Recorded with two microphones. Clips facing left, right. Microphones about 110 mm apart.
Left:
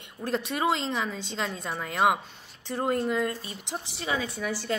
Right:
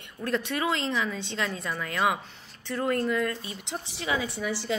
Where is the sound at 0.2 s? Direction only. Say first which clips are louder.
Right 1 dB; 30° left (ahead or behind).